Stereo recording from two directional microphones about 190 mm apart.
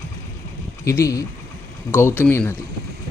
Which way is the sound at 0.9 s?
15° left (ahead or behind).